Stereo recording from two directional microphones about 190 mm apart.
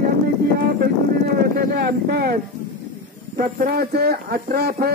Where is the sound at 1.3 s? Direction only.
55° right (ahead or behind).